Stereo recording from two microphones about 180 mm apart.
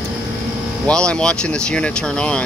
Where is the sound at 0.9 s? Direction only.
5° left (ahead or behind).